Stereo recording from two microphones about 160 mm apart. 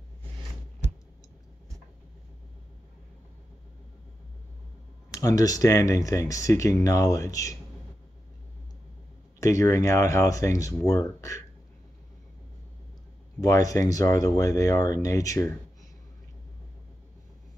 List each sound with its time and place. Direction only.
5.1 s speech: 20° left (ahead or behind)
9.4 s speech: 20° left (ahead or behind)
13.4 s speech: 20° left (ahead or behind)